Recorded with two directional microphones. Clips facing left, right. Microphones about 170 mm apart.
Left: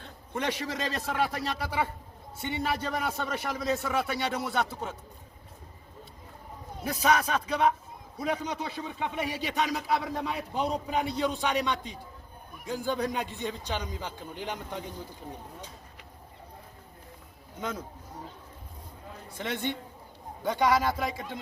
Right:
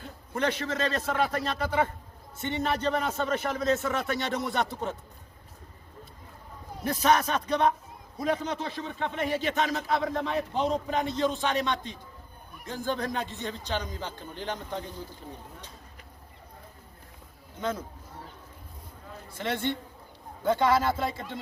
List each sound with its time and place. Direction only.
0.3 s a man's voice: 10° left (ahead or behind)
6.8 s a man's voice: 10° left (ahead or behind)
19.4 s a man's voice: 20° left (ahead or behind)